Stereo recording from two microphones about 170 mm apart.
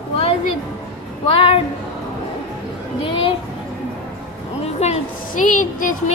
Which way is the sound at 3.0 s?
30° left (ahead or behind).